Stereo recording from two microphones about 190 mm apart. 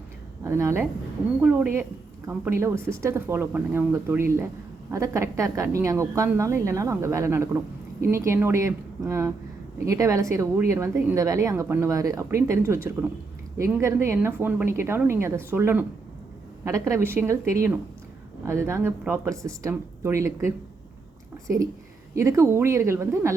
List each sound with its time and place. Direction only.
0.4 s a woman's voice: 15° right (ahead or behind)